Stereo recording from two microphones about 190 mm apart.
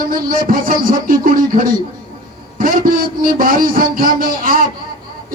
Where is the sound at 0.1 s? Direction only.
45° right (ahead or behind).